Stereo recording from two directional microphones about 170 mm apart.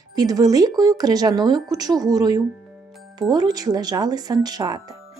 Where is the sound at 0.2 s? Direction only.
20° right (ahead or behind).